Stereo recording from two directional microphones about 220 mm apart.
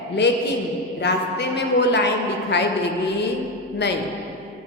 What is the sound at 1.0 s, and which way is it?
A woman's voice, 50° left (ahead or behind).